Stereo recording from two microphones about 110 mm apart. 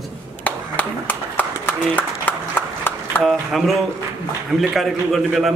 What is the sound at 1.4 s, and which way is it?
Clapping, 15° left (ahead or behind).